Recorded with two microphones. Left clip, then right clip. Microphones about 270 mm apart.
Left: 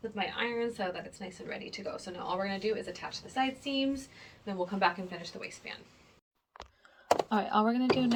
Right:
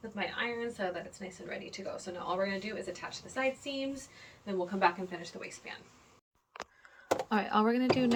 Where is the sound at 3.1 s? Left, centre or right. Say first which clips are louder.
Left 1 dB; centre.